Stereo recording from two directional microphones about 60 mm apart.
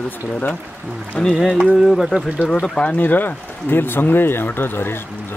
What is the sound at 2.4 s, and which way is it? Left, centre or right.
Speech, centre.